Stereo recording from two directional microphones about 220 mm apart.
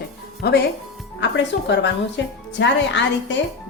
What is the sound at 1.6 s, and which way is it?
A woman's voice, 55° left (ahead or behind).